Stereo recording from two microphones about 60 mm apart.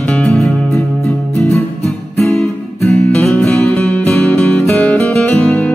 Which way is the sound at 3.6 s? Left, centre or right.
Left.